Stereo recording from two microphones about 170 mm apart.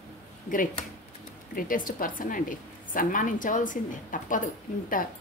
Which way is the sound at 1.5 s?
55° left (ahead or behind).